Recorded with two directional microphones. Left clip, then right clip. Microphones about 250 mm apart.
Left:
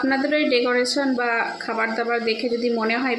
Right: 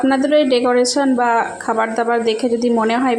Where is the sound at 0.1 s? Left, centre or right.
Right.